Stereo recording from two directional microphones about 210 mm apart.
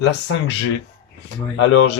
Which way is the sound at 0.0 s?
55° left (ahead or behind).